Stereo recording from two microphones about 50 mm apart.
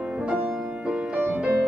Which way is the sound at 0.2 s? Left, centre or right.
Centre.